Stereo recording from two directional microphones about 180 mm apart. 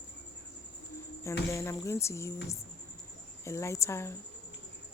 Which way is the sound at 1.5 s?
15° left (ahead or behind).